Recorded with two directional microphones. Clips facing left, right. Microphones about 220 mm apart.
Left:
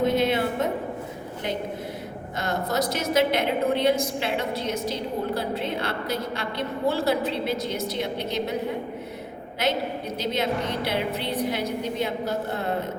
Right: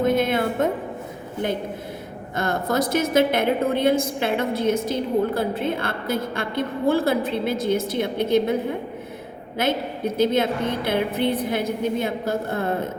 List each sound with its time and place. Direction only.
0.0 s music: 50° right (ahead or behind)
2.3 s a woman's voice: 50° right (ahead or behind)
10.2 s a woman's voice: 50° right (ahead or behind)